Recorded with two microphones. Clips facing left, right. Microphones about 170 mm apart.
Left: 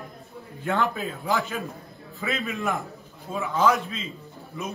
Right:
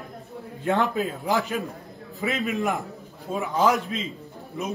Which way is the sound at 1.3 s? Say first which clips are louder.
Left 2 dB; 20° right (ahead or behind).